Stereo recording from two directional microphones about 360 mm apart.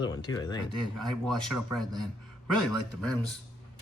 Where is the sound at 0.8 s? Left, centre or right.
Centre.